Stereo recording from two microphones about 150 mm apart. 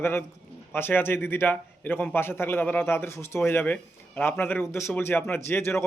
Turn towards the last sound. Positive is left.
turn(degrees=15)  # may be behind; listen again after turning